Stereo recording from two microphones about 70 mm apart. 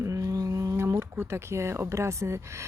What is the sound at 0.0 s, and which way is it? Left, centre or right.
Speech, right.